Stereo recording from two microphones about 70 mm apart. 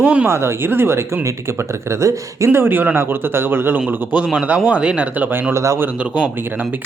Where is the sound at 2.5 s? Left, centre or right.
Right; by 5.0 s centre.